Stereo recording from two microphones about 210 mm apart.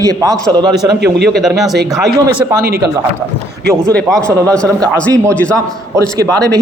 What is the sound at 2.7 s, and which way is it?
Speech, 50° right (ahead or behind).